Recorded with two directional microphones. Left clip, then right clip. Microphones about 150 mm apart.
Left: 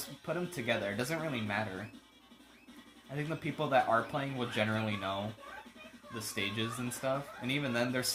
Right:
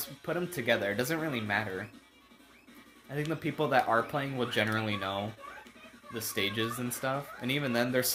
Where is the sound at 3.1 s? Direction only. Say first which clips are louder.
Right 4 dB; 35° right (ahead or behind).